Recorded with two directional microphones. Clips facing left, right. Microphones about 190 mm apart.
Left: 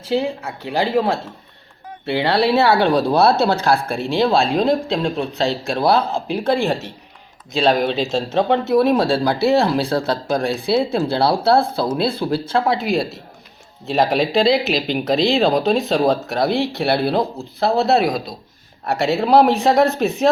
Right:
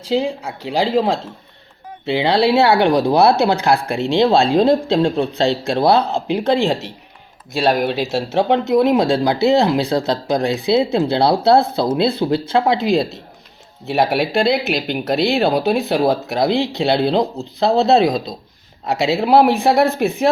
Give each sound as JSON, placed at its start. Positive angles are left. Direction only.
{"t": 0.1, "sound": "speech", "side_deg": -15}
{"t": 7.6, "sound": "speech", "side_deg": -5}
{"t": 13.8, "sound": "speech", "side_deg": -10}